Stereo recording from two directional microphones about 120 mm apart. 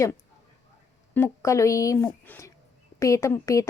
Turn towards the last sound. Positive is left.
turn(degrees=25)  # may be behind; listen again after turning